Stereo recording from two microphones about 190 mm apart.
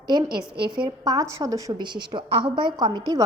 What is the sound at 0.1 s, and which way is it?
A woman's voice, 20° right (ahead or behind).